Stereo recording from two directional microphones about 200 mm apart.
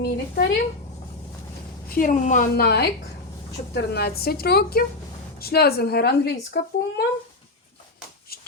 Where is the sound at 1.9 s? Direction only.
40° left (ahead or behind).